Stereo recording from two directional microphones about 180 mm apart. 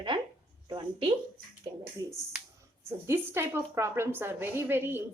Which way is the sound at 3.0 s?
15° right (ahead or behind).